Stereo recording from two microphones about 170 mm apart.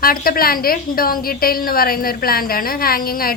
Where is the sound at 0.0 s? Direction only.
60° left (ahead or behind).